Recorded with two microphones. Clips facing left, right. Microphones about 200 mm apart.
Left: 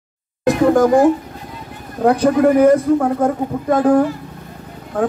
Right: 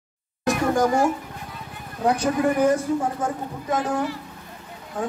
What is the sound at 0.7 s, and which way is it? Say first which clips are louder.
Speech: left 7 dB; 55° left (ahead or behind).